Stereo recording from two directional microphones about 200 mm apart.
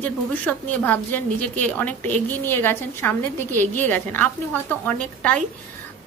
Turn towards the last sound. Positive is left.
turn(degrees=5)  # may be behind; listen again after turning